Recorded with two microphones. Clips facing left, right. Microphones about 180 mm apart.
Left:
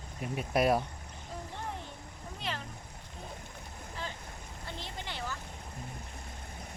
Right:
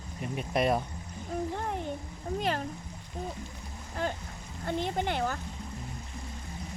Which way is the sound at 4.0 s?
50° right (ahead or behind).